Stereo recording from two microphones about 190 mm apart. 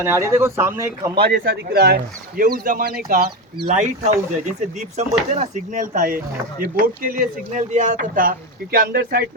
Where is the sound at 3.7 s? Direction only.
40° right (ahead or behind).